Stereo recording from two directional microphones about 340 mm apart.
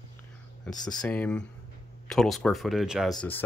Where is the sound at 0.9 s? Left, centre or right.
Centre.